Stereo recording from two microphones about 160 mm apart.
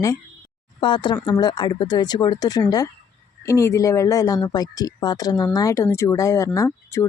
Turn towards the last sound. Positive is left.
turn(degrees=20)  # may be behind; listen again after turning